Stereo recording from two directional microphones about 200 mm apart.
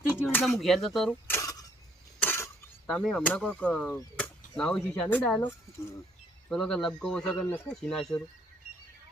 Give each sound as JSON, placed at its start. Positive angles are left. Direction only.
{"t": 0.3, "sound": "speech", "side_deg": 0}
{"t": 1.4, "sound": "mechanisms", "side_deg": 15}
{"t": 2.2, "sound": "cutlery", "side_deg": 10}
{"t": 6.5, "sound": "speech", "side_deg": 5}